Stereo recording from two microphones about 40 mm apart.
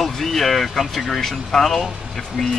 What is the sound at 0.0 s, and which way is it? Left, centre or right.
Speech, centre.